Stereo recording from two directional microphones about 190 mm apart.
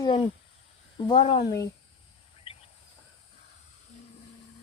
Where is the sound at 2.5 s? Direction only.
30° left (ahead or behind).